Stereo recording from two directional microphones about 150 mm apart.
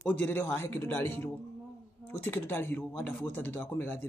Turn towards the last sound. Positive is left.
turn(degrees=15)  # may be behind; listen again after turning